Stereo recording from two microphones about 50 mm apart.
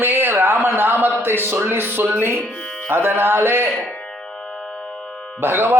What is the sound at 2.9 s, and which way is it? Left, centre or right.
Speech, right.